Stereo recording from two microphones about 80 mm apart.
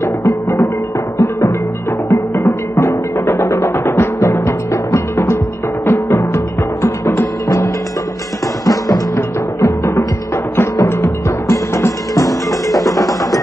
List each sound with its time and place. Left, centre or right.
0.0 s music: left
3.9 s music: left
8.6 s music: left
9.1 s music: left